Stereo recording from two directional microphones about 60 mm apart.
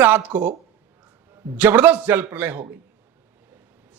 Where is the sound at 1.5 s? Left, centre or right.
Right.